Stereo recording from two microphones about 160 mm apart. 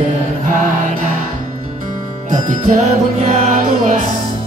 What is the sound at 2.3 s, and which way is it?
Music, 55° right (ahead or behind).